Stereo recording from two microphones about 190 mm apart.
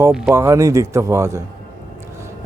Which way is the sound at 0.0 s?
5° right (ahead or behind).